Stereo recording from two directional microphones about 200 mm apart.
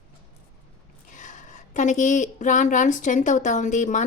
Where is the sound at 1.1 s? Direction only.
40° left (ahead or behind).